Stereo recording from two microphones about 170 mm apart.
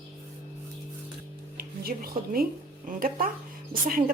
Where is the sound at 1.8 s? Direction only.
60° right (ahead or behind).